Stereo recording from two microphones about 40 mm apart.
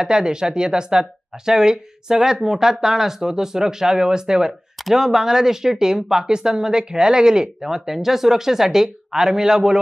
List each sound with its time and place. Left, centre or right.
0.0 s speech: centre